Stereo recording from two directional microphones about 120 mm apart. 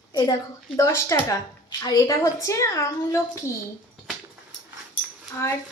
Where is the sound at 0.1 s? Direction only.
35° left (ahead or behind).